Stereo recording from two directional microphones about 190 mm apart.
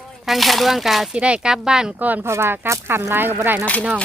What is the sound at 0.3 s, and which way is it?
Speech, centre (ahead or behind).